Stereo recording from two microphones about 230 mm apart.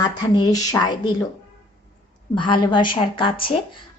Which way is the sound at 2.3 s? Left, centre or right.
Left.